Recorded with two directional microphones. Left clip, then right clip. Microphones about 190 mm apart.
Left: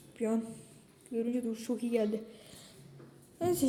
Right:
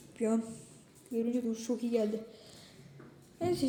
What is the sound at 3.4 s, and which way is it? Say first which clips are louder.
Speech: left 1 dB; 20° left (ahead or behind).